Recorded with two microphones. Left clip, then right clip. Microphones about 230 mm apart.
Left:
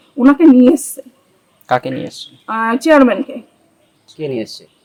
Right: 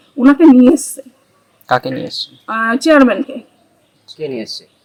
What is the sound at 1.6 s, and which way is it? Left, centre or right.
Speech, centre.